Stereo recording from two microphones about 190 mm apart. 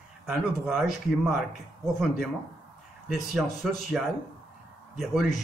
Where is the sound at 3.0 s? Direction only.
Centre (ahead or behind).